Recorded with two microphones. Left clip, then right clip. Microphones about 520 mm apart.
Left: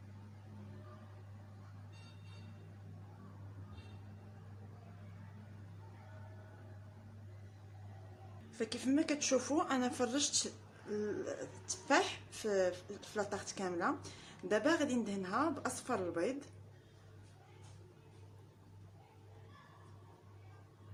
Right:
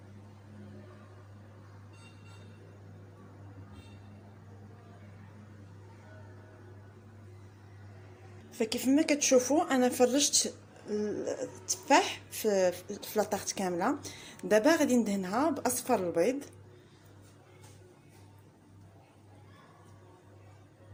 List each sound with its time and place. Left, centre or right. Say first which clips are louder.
8.4 s speech: right 8 dB; left